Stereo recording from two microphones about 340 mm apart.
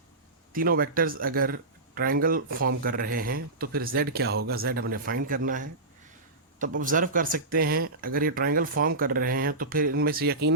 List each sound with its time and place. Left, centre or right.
0.5 s speech: right